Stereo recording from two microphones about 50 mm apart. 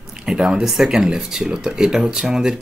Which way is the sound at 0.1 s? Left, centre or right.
Centre.